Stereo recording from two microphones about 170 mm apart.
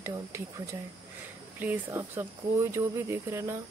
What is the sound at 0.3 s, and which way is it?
Speech, 15° right (ahead or behind).